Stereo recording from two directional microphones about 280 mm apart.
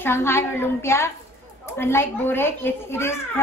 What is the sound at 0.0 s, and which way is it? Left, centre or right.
A child's voice, centre.